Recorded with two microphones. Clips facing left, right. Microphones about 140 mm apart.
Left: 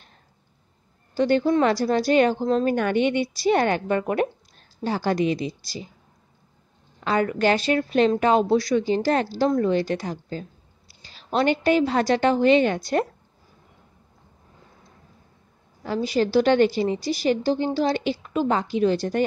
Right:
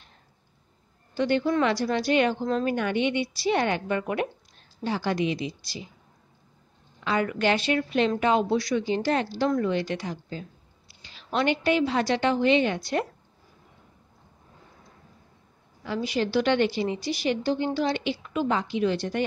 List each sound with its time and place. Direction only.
1.1 s a woman's voice: 40° left (ahead or behind)
7.0 s a woman's voice: 40° left (ahead or behind)
15.8 s a woman's voice: 40° left (ahead or behind)